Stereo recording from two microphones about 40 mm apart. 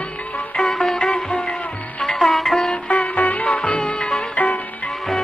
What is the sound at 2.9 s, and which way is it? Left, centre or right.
Music, left.